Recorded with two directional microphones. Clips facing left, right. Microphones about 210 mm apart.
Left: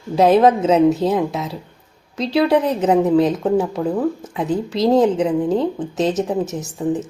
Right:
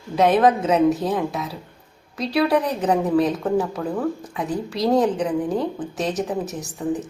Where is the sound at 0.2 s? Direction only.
30° left (ahead or behind).